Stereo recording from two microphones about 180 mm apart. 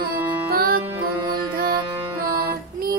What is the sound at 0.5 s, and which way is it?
Music, 55° right (ahead or behind).